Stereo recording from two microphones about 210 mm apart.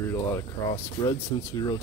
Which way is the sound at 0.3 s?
15° left (ahead or behind).